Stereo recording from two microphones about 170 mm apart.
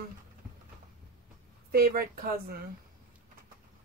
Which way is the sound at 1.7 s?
60° right (ahead or behind).